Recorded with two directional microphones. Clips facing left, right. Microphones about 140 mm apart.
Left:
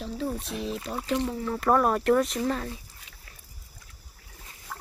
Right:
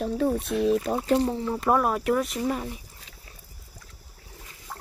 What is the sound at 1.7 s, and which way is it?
Speech, 5° right (ahead or behind).